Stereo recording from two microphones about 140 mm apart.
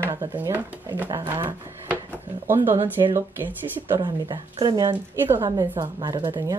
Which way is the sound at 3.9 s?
35° right (ahead or behind).